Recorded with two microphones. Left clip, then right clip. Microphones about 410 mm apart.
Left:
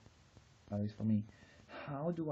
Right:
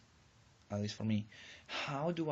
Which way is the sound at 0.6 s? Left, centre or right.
Left.